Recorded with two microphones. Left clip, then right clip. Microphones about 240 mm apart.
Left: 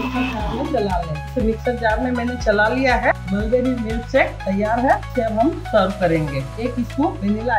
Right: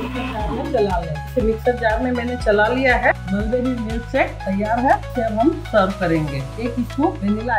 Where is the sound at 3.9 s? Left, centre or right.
Centre.